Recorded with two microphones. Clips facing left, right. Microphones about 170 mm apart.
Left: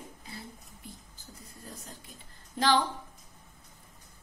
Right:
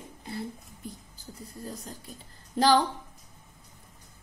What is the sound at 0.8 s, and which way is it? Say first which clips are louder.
Speech: right 7 dB; 45° right (ahead or behind).